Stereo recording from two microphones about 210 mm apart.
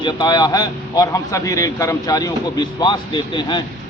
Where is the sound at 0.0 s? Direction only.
20° left (ahead or behind).